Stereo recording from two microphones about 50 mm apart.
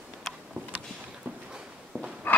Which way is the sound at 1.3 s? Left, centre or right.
Right.